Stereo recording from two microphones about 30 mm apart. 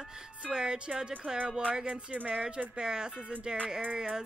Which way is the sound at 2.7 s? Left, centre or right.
Right.